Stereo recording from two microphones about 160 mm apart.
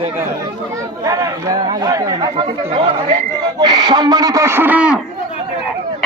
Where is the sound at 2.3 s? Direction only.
35° right (ahead or behind).